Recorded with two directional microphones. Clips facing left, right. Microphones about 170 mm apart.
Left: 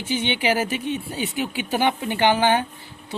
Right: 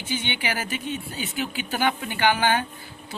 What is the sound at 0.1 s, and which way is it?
Speech, 35° left (ahead or behind).